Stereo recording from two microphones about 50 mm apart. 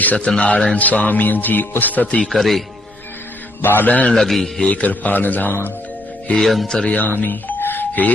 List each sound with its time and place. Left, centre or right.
0.0 s a man's voice: left
2.3 s speech: centre
3.6 s a man's voice: left
4.1 s a man's voice: centre
4.6 s a man's voice: left
6.3 s speech: centre
6.7 s a man's voice: centre
6.9 s speech: left